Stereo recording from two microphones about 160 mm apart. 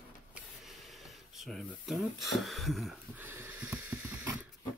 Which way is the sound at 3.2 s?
10° right (ahead or behind).